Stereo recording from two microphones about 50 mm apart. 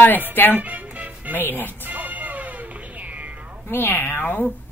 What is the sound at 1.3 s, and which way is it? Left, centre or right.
Speech, left.